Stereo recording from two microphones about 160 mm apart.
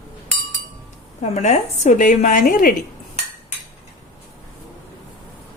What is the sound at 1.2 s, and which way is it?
A woman's voice, 45° left (ahead or behind).